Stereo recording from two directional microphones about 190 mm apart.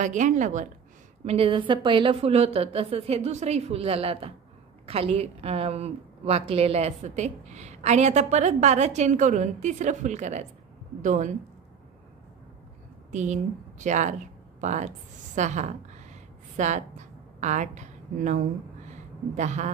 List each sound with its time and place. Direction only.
0.0 s a woman's voice: 40° right (ahead or behind)
1.2 s a woman's voice: 30° right (ahead or behind)
13.1 s a woman's voice: 40° right (ahead or behind)
14.6 s a sound: 40° right (ahead or behind)
17.4 s a woman's voice: 40° right (ahead or behind)